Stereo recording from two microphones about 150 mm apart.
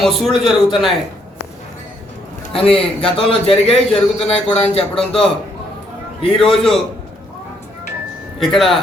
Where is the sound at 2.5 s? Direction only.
40° left (ahead or behind).